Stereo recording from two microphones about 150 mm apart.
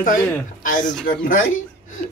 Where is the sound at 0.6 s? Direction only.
60° left (ahead or behind).